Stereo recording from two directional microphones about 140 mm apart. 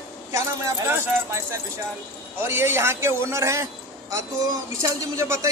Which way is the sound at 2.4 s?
15° right (ahead or behind).